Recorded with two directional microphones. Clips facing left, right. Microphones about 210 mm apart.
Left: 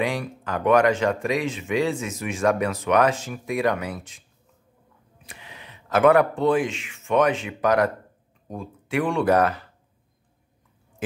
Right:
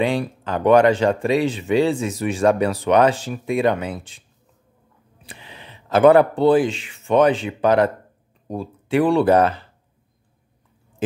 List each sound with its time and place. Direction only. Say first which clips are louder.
0.0 s speech: right 5 dB; 30° right (ahead or behind)
5.2 s speech: right 3 dB; 30° right (ahead or behind)